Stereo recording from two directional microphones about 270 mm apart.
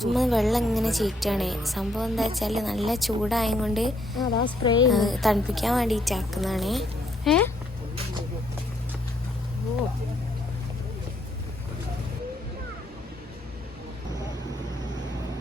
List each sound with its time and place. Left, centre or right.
0.0 s a woman's voice: centre
4.4 s a woman's voice: centre
4.9 s a woman's voice: centre